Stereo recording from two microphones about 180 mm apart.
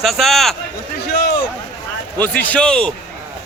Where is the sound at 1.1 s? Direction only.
55° left (ahead or behind).